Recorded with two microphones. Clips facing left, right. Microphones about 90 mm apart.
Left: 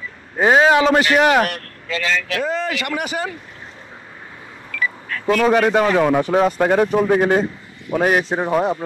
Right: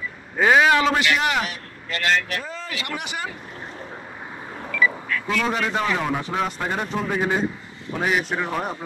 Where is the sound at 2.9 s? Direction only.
40° left (ahead or behind).